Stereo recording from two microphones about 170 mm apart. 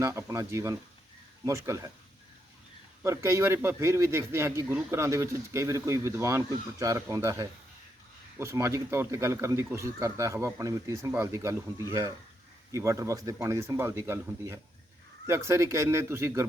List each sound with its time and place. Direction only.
0.0 s a man's voice: 15° right (ahead or behind)
3.0 s a man's voice: 15° right (ahead or behind)